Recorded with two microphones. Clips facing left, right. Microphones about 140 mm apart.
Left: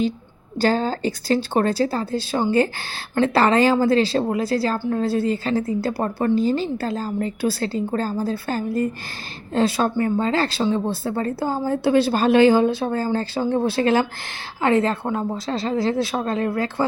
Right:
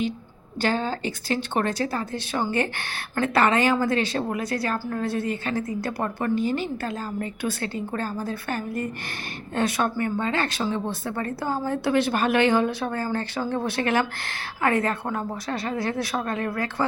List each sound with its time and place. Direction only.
0.6 s a woman's voice: 35° left (ahead or behind)